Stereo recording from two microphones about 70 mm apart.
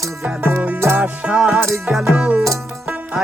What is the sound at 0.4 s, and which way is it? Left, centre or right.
Music, right.